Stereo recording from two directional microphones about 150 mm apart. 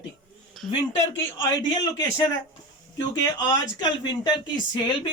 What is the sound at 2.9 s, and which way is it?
Speech, 25° left (ahead or behind).